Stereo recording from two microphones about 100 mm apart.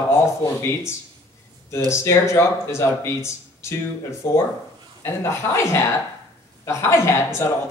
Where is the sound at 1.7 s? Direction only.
30° left (ahead or behind).